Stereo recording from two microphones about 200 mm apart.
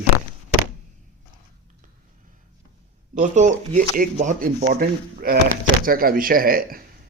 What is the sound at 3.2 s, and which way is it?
Speech, 40° right (ahead or behind).